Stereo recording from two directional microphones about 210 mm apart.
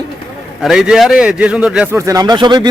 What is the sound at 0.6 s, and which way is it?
A man's voice, centre (ahead or behind).